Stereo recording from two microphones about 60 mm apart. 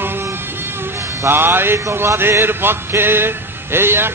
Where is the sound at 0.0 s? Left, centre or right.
Right.